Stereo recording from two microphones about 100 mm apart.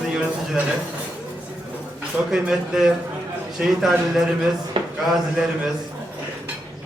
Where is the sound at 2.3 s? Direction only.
5° right (ahead or behind).